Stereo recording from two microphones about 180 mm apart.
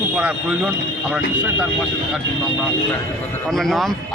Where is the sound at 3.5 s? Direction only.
Centre (ahead or behind).